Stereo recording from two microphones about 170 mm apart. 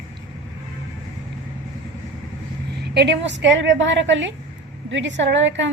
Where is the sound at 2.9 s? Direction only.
85° right.